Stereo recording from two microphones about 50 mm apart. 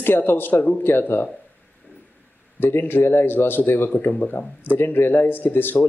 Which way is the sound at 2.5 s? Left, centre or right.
Left.